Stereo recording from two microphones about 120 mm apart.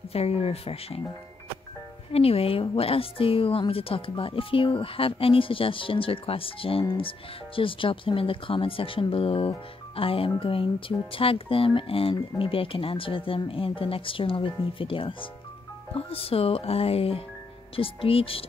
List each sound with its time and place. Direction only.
0.1 s speech: 55° left (ahead or behind)
2.1 s speech: 55° left (ahead or behind)